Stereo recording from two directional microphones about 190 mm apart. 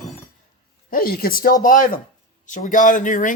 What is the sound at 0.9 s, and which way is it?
A woman's voice, 50° left (ahead or behind).